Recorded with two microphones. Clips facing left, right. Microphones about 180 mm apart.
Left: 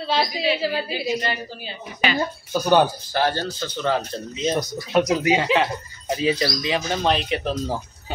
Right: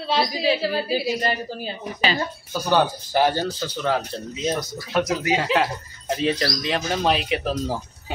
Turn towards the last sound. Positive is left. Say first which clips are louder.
# even
turn(degrees=-5)  # may be behind; listen again after turning